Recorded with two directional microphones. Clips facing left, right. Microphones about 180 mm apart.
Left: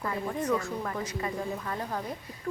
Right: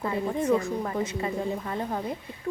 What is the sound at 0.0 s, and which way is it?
Speech, 25° right (ahead or behind).